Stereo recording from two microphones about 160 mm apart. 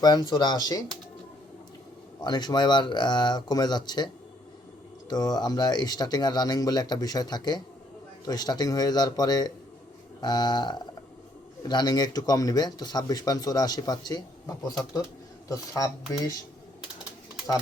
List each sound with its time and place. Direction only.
0.3 s speech: 25° left (ahead or behind)
2.2 s speech: 25° left (ahead or behind)